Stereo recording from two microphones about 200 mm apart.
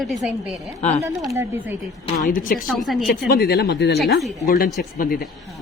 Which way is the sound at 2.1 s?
40° left (ahead or behind).